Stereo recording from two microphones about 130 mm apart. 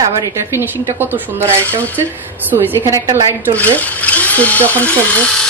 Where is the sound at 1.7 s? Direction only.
15° left (ahead or behind).